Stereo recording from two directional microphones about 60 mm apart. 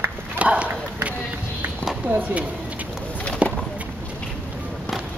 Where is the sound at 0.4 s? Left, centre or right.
Right.